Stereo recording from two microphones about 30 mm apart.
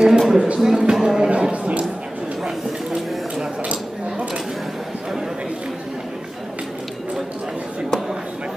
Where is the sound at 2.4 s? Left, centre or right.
Right.